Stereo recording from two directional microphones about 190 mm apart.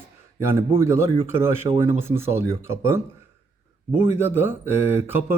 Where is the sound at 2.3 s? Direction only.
90° left.